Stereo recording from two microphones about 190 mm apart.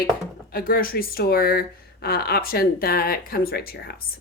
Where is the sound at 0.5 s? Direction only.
50° left (ahead or behind).